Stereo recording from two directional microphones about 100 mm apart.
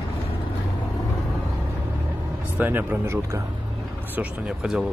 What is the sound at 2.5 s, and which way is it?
Speech, 20° right (ahead or behind).